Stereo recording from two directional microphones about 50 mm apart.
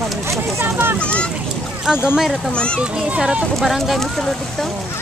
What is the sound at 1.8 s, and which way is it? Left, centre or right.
Speech, centre.